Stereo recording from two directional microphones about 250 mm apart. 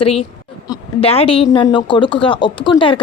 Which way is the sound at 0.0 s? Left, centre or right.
Left.